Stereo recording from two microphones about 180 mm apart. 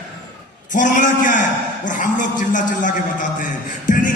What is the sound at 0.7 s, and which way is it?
Music, 45° left (ahead or behind).